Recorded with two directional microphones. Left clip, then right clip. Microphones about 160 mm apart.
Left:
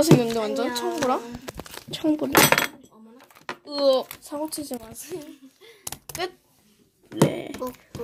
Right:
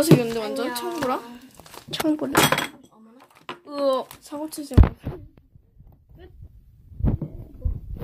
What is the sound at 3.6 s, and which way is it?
Speech, 10° left (ahead or behind).